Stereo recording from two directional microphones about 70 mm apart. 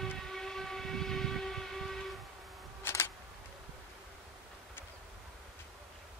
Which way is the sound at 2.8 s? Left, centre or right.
Left.